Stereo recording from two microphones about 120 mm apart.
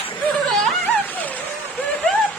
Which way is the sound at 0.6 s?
Centre (ahead or behind).